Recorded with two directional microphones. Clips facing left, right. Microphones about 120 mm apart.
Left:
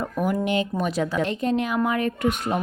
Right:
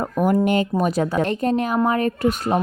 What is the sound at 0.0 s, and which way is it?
A woman's voice, 45° right (ahead or behind).